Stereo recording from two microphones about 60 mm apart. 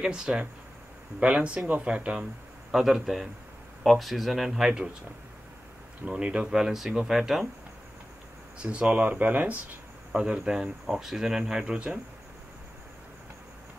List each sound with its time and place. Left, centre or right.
0.0 s speech: centre
2.7 s speech: centre
6.0 s speech: centre
8.8 s speech: centre
10.1 s speech: centre